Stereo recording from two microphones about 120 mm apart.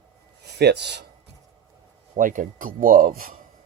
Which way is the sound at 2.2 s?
90° right.